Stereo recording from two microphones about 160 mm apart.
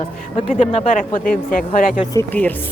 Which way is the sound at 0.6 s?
45° left (ahead or behind).